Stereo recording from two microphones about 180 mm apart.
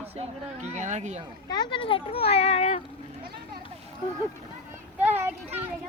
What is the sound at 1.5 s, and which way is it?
A child's voice, 25° left (ahead or behind).